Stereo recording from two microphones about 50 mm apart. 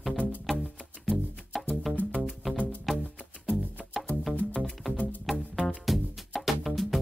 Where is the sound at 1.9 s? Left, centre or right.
Centre.